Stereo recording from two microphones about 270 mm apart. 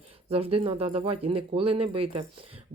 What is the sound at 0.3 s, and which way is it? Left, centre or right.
Speech, right.